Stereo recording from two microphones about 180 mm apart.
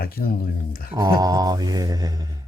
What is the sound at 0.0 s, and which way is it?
Speech, 55° left (ahead or behind).